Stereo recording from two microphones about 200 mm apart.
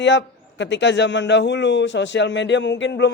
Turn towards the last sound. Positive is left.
turn(degrees=60)  # may be behind; listen again after turning